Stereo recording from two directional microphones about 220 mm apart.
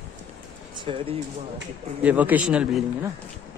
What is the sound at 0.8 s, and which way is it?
Speech, 25° right (ahead or behind).